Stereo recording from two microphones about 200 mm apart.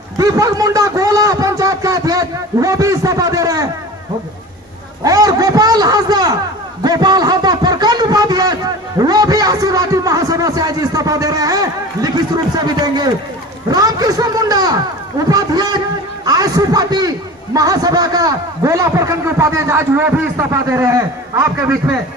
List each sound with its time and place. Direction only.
0.2 s a man's voice: 20° right (ahead or behind)
5.0 s a man's voice: 20° right (ahead or behind)